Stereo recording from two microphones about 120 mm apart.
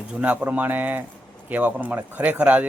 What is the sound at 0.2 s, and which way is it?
Speech, 10° right (ahead or behind).